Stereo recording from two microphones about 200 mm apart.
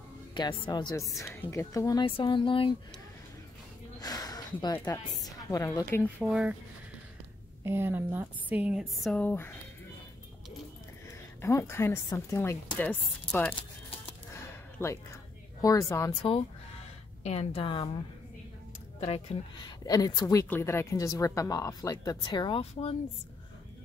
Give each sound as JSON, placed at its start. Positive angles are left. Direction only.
{"t": 0.3, "sound": "speech", "side_deg": 20}
{"t": 4.0, "sound": "a sound", "side_deg": 20}
{"t": 4.7, "sound": "speech", "side_deg": 15}
{"t": 6.2, "sound": "speech", "side_deg": 0}
{"t": 7.6, "sound": "a woman's voice", "side_deg": -15}
{"t": 11.4, "sound": "speech", "side_deg": 15}
{"t": 14.3, "sound": "a sound", "side_deg": 15}
{"t": 15.6, "sound": "a woman's voice", "side_deg": 15}
{"t": 18.9, "sound": "speech", "side_deg": 30}